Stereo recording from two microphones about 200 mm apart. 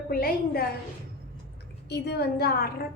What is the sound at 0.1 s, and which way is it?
Speech, 45° left (ahead or behind).